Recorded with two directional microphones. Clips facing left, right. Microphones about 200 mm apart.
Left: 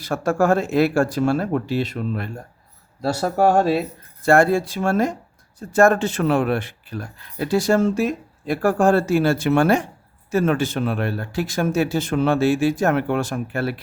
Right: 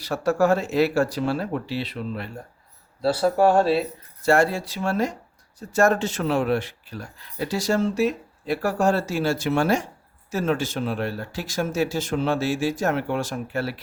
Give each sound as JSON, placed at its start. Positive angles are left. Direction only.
{"t": 0.0, "sound": "speech", "side_deg": 50}